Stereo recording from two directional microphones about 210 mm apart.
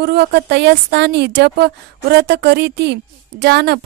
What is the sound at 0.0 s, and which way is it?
Speech, 50° right (ahead or behind).